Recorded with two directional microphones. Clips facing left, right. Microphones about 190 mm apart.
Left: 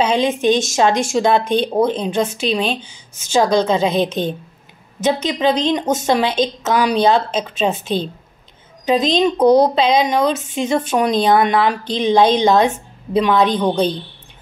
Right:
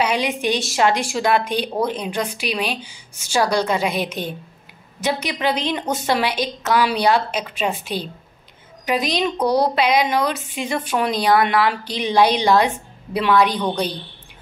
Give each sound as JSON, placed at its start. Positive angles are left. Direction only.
{"t": 0.0, "sound": "a woman's voice", "side_deg": 20}